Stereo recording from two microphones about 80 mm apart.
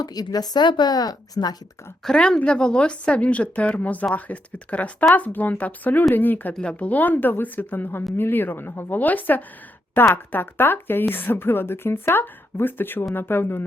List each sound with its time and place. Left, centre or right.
0.0 s speech: left
2.0 s speech: centre
6.5 s speech: centre